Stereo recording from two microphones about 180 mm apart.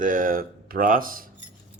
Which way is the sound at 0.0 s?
45° right (ahead or behind).